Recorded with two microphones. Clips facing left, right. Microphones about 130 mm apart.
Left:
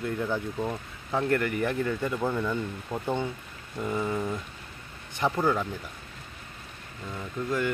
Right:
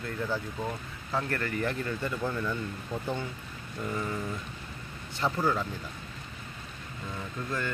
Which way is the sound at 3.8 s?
20° left (ahead or behind).